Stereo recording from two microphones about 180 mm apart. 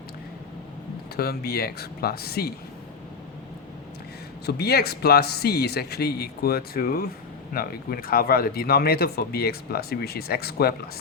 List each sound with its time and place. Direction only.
1.1 s speech: 60° left (ahead or behind)
4.4 s speech: 60° left (ahead or behind)